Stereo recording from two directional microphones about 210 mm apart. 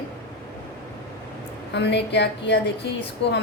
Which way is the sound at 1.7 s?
55° left (ahead or behind).